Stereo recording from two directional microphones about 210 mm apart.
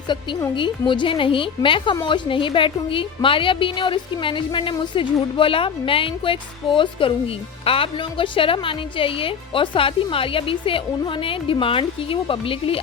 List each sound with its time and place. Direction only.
0.1 s a woman's voice: 20° left (ahead or behind)